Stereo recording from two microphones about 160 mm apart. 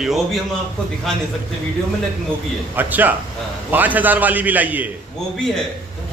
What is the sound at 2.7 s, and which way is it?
A man's voice, 10° right (ahead or behind).